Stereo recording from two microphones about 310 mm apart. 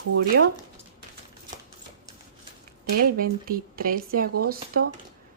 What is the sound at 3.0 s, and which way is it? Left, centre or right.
Speech, right.